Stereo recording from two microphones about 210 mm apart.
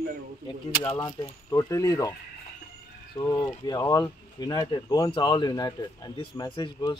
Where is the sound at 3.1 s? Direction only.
15° left (ahead or behind).